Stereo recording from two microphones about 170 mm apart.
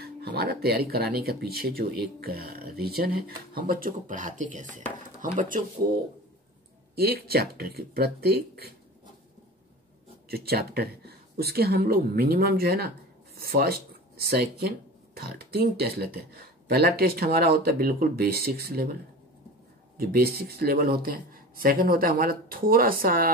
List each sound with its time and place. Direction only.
0.0 s speech: 65° right (ahead or behind); by 5.6 s 45° right (ahead or behind)
7.0 s speech: 65° right (ahead or behind)
10.3 s speech: 65° right (ahead or behind)
20.0 s speech: 65° right (ahead or behind)